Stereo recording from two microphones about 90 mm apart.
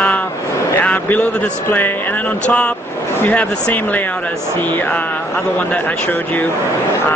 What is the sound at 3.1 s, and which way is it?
Speech, 20° left (ahead or behind).